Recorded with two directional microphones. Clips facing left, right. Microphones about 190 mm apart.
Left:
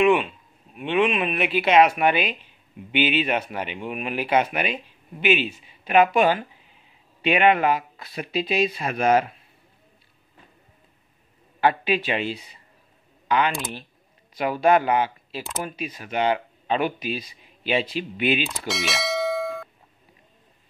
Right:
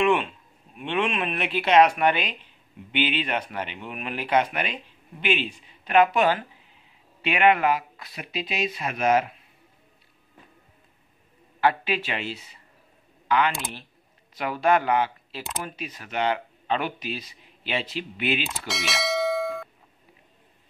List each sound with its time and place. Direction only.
0.0 s speech: 5° left (ahead or behind); by 9.2 s 35° left (ahead or behind)
11.6 s speech: 15° left (ahead or behind)
14.3 s speech: 10° left (ahead or behind)
18.7 s bell: centre (ahead or behind)